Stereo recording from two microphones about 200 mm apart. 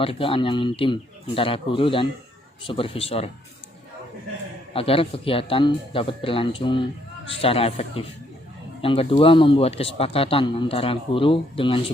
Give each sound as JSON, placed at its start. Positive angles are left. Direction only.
{"t": 0.0, "sound": "speech", "side_deg": 25}
{"t": 4.7, "sound": "speech", "side_deg": 30}